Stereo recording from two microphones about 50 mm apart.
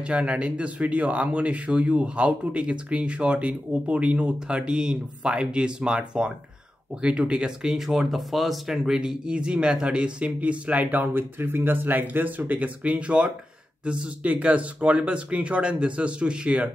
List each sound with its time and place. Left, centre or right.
0.0 s speech: right
11.1 s speech: right